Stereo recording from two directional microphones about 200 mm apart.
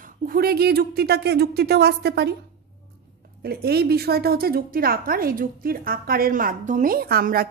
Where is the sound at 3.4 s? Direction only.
50° right (ahead or behind).